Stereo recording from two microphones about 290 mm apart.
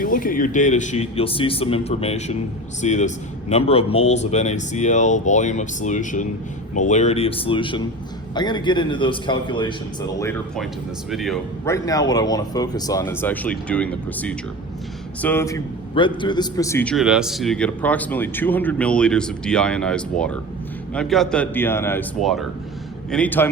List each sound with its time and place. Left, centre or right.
0.0 s speech: left
10.2 s a man's voice: centre